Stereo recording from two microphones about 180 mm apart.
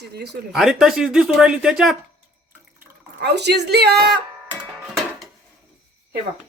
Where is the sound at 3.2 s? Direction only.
70° right (ahead or behind).